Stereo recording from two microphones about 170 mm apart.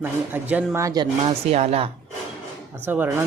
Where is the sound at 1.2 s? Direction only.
40° right (ahead or behind).